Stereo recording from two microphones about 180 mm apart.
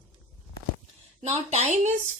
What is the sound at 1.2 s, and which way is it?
Speech, 35° right (ahead or behind).